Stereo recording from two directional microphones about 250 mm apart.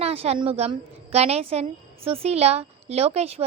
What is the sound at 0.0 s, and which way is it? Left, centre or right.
A woman's voice, right.